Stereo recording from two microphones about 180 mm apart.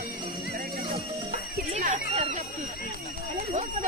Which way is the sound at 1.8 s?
35° right (ahead or behind).